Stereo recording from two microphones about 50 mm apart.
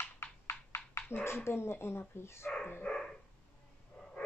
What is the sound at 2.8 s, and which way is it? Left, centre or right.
Dog, left.